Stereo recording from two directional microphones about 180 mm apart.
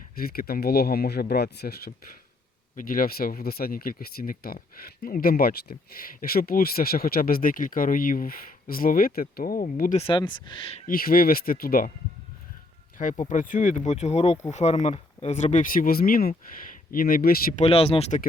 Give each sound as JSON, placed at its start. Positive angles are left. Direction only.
{"t": 0.2, "sound": "speech", "side_deg": 55}
{"t": 10.0, "sound": "speech", "side_deg": 25}
{"t": 10.8, "sound": "speech", "side_deg": 55}
{"t": 13.0, "sound": "speech", "side_deg": 45}
{"t": 17.6, "sound": "speech", "side_deg": 35}